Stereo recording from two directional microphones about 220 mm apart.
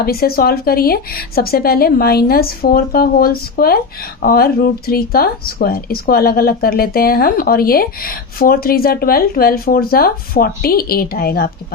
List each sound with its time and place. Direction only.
0.0 s speech: 45° left (ahead or behind)